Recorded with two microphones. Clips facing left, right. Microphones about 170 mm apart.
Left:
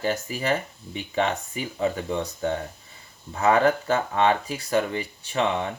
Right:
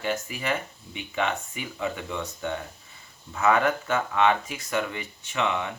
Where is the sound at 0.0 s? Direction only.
35° left (ahead or behind).